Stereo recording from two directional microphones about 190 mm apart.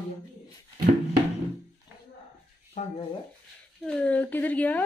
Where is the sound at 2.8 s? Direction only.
40° left (ahead or behind).